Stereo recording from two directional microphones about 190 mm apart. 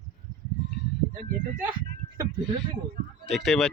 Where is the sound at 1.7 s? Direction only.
20° right (ahead or behind).